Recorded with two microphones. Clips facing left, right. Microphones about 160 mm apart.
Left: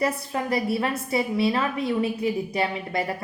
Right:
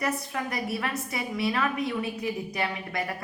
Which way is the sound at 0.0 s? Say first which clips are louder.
Left 4 dB; 30° left (ahead or behind).